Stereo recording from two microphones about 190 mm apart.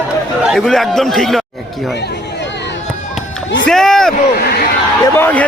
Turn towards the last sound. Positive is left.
turn(degrees=10)  # may be behind; listen again after turning